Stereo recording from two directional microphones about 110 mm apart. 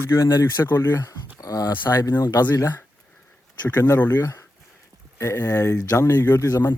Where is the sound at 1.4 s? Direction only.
35° left (ahead or behind).